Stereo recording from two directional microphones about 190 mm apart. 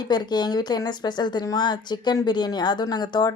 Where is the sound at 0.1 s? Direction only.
20° left (ahead or behind).